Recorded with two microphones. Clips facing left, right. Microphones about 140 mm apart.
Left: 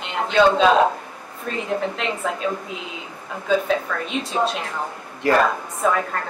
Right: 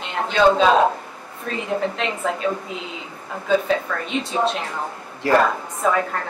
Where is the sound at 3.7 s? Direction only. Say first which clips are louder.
Right 1 dB; centre (ahead or behind).